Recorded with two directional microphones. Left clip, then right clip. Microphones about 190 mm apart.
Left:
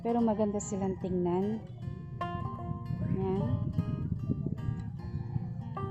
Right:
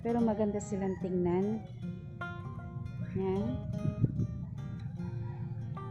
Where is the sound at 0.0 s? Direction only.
15° left (ahead or behind).